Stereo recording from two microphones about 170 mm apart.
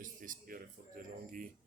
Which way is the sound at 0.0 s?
55° right (ahead or behind).